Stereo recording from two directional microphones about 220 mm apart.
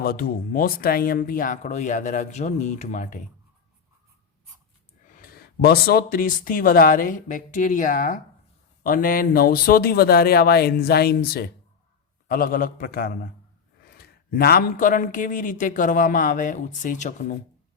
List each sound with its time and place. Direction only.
0.0 s a man's voice: 45° left (ahead or behind)
5.2 s a man's voice: 45° left (ahead or behind)